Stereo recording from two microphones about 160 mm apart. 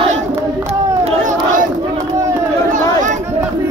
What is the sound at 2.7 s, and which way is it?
Chatter, 50° right (ahead or behind).